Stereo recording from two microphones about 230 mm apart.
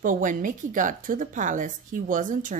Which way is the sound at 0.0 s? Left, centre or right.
Right.